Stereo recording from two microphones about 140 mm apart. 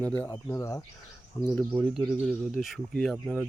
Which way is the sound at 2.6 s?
Centre (ahead or behind).